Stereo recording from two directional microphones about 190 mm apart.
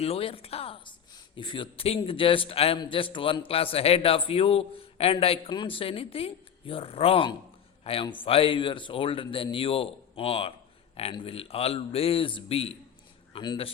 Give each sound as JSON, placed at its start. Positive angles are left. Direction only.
{"t": 0.0, "sound": "a man's voice", "side_deg": 30}